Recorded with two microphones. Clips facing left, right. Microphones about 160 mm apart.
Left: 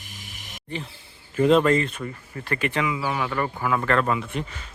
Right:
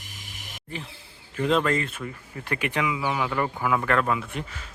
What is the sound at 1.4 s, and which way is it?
Speech, 5° left (ahead or behind).